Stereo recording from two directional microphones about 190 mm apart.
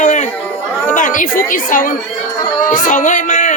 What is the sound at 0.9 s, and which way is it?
A woman's voice, 45° left (ahead or behind).